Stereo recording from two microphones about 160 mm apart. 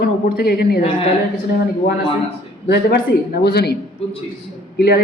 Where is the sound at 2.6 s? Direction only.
80° left.